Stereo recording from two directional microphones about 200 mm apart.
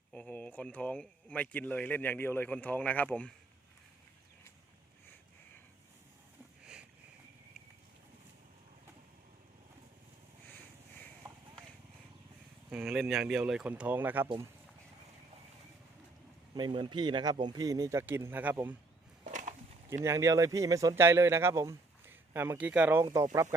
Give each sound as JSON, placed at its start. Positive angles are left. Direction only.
{"t": 0.1, "sound": "speech", "side_deg": 5}
{"t": 12.7, "sound": "speech", "side_deg": 0}
{"t": 16.6, "sound": "speech", "side_deg": -20}
{"t": 19.2, "sound": "a sound", "side_deg": -40}
{"t": 20.1, "sound": "speech", "side_deg": -15}